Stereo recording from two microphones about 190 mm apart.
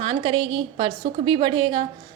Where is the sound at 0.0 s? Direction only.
25° right (ahead or behind).